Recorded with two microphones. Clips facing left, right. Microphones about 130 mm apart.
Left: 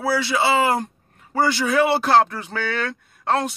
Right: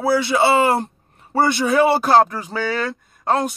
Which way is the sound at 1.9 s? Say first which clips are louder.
Right 2 dB; 40° right (ahead or behind).